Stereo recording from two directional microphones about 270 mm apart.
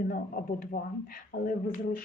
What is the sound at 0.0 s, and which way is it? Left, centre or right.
Speech, left.